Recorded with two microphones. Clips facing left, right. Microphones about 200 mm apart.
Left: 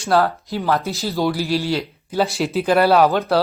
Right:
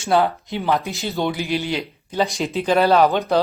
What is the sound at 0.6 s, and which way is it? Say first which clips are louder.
Speech: left 1 dB; 15° right (ahead or behind).